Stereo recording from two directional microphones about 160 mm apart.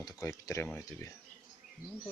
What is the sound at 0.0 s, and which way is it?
Speech, 20° left (ahead or behind).